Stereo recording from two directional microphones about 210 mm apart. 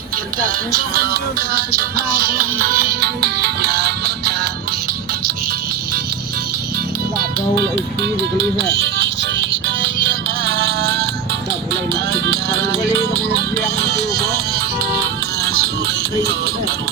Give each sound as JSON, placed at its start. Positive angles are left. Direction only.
{"t": 0.9, "sound": "music", "side_deg": -45}
{"t": 7.2, "sound": "music", "side_deg": -55}